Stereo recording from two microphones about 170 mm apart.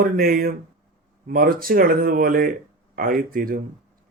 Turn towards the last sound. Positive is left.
turn(degrees=-55)  # may be behind; listen again after turning